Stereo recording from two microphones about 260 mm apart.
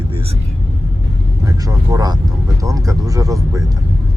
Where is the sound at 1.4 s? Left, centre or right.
Centre.